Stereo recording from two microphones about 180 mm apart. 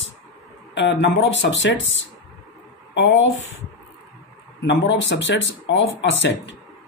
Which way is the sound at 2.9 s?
90° left.